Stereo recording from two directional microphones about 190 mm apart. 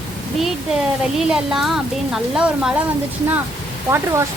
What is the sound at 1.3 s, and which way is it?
A woman's voice, centre (ahead or behind).